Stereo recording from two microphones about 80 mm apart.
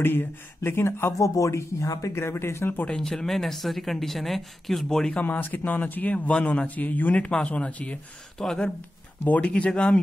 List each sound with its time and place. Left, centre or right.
0.0 s a man's voice: left
2.9 s speech: centre
5.2 s a man's voice: left